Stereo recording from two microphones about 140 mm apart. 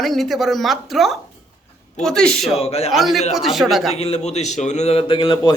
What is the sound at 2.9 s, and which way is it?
Speech, centre (ahead or behind).